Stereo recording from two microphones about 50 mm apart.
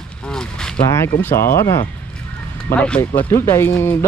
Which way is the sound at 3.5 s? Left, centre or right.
Left.